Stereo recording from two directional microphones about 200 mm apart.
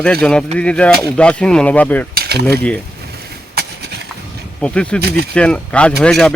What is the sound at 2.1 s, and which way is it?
Cutlery, 55° right (ahead or behind).